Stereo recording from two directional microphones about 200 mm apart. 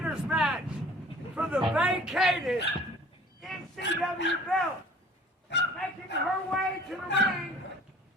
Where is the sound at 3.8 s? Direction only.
60° left (ahead or behind).